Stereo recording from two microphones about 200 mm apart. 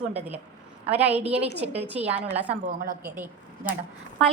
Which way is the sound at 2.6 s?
40° right (ahead or behind).